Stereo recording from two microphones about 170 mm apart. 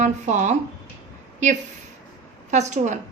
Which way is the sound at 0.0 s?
45° right (ahead or behind).